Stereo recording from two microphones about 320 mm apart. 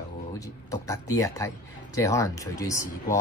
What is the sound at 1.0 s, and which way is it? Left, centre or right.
Speech, centre.